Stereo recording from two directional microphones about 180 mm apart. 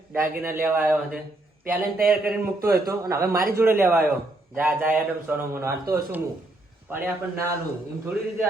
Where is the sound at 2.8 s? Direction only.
20° right (ahead or behind).